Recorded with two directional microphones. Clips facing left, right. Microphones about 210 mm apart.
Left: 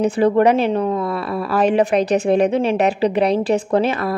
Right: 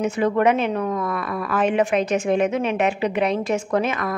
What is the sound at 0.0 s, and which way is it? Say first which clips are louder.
A woman's voice: left 5 dB; 35° left (ahead or behind).